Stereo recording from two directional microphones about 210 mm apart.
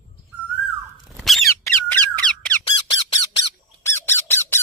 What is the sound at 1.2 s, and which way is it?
Squeak, centre (ahead or behind).